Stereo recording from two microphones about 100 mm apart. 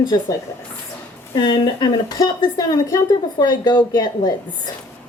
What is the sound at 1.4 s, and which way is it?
A woman's voice, 50° left (ahead or behind).